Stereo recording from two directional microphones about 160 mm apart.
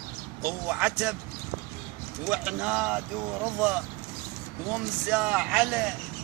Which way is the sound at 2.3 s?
5° right (ahead or behind).